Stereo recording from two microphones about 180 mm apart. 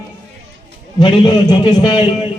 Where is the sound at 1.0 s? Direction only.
25° left (ahead or behind).